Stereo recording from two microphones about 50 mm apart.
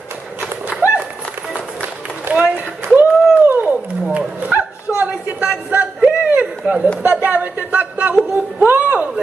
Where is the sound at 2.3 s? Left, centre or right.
Right.